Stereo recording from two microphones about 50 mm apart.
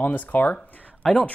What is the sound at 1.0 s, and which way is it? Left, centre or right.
Speech, left.